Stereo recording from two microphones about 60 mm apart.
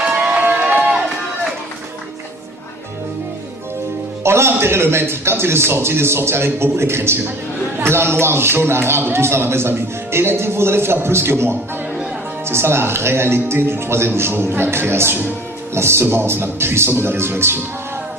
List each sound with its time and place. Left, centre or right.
0.0 s crowd: centre
0.4 s a sound: right
4.2 s a man's voice: right